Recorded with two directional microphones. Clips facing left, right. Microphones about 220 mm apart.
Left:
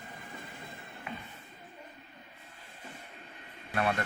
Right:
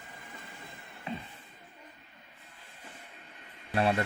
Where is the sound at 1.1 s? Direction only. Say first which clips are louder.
Right 5 dB; 30° right (ahead or behind).